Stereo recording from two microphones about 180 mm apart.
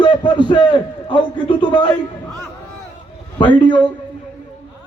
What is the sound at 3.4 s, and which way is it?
Speech, 25° left (ahead or behind).